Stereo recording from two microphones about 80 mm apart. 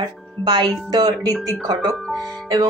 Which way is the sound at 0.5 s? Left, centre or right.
Right.